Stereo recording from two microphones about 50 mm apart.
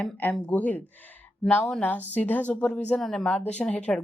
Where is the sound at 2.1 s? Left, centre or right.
Left.